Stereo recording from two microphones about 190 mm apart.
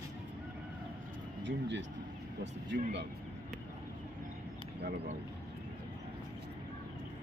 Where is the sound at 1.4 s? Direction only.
70° right (ahead or behind).